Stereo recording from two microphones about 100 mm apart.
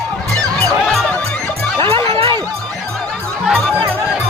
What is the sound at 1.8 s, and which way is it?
Music, 60° right (ahead or behind).